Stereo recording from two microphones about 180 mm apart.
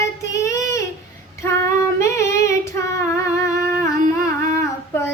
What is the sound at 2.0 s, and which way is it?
Singing, 15° left (ahead or behind).